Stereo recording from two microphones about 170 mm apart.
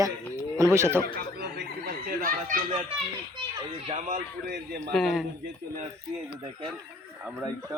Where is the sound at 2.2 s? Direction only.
50° right (ahead or behind).